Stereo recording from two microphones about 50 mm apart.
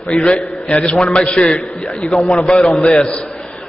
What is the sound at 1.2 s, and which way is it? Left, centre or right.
A man's voice, centre.